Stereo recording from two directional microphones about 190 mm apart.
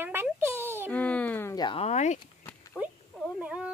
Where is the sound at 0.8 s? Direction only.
5° left (ahead or behind); by 2.1 s 35° left (ahead or behind).